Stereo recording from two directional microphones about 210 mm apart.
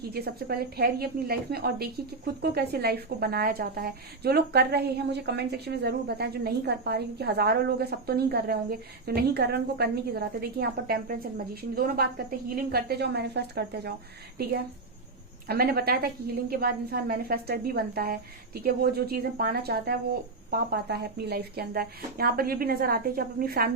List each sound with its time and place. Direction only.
0.1 s a woman's voice: 50° right (ahead or behind)
15.4 s a woman's voice: 45° right (ahead or behind)